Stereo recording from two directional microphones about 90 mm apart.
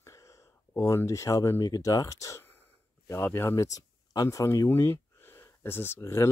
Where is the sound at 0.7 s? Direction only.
30° left (ahead or behind).